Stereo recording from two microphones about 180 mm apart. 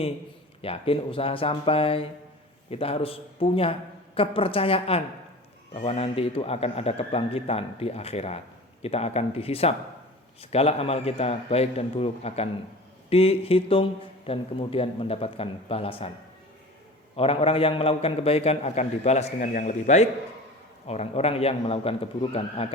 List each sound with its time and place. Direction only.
0.6 s a man's voice: 30° left (ahead or behind)
17.2 s a man's voice: 30° left (ahead or behind)